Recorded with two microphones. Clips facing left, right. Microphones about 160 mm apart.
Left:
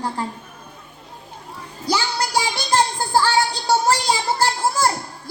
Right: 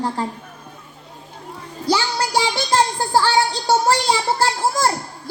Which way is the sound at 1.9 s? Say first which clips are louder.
Right 2 dB; 35° right (ahead or behind).